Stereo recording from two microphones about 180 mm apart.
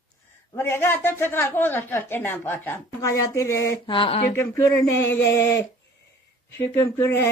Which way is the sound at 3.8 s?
30° left (ahead or behind).